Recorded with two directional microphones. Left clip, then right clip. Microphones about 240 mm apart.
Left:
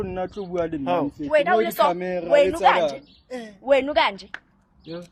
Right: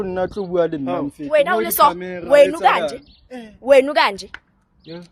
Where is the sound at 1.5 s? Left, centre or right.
Right.